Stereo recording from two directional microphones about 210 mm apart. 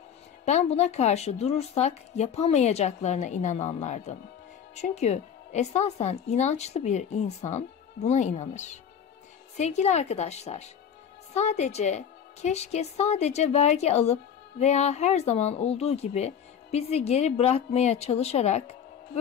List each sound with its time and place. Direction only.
0.5 s speech: 30° left (ahead or behind)